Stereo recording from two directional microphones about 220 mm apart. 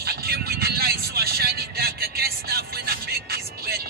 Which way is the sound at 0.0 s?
45° right (ahead or behind).